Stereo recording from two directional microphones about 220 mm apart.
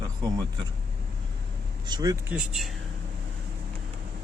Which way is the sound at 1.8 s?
20° right (ahead or behind).